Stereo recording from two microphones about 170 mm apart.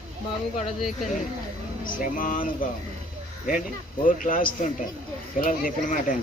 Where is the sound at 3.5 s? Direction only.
50° left (ahead or behind).